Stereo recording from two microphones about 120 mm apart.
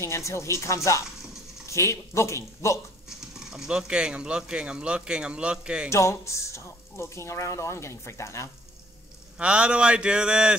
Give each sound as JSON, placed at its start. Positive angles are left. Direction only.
{"t": 0.0, "sound": "speech", "side_deg": 25}
{"t": 3.1, "sound": "speech", "side_deg": -5}
{"t": 5.9, "sound": "speech", "side_deg": 25}
{"t": 9.4, "sound": "speech", "side_deg": -10}